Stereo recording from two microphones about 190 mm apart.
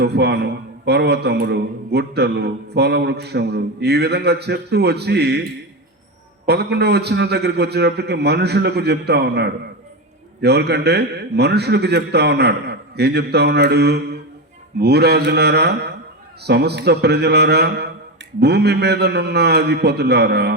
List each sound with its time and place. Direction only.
0.0 s a man's voice: 60° right (ahead or behind)
6.4 s a man's voice: 60° right (ahead or behind)